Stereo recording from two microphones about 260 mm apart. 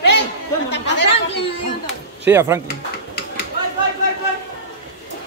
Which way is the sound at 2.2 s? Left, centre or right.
Centre.